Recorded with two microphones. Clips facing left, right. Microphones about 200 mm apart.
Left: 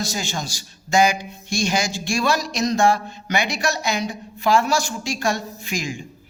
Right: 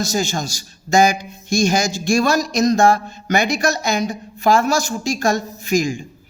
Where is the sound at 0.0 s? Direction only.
45° right (ahead or behind).